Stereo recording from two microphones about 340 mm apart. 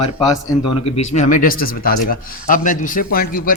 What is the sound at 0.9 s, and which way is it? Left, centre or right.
A man's voice, centre.